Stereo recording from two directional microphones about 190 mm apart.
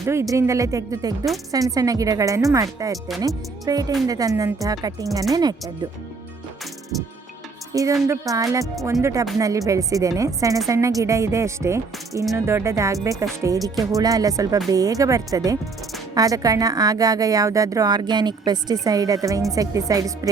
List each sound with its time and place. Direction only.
0.0 s speech: 15° right (ahead or behind)
7.7 s a woman's voice: 15° right (ahead or behind)